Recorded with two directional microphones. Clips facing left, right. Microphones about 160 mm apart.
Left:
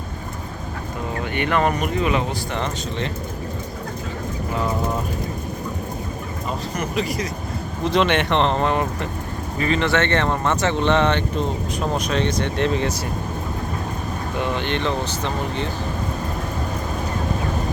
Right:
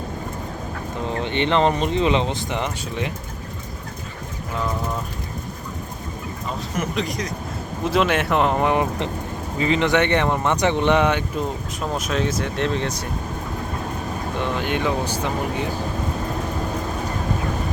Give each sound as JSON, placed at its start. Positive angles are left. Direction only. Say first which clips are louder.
{"t": 1.1, "sound": "speech", "louder": "right 2 dB", "side_deg": -25}
{"t": 6.7, "sound": "speech", "louder": "even", "side_deg": 5}
{"t": 14.3, "sound": "speech", "louder": "even", "side_deg": 0}